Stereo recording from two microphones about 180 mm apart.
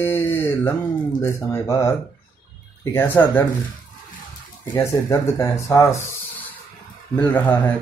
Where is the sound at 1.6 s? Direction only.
15° left (ahead or behind).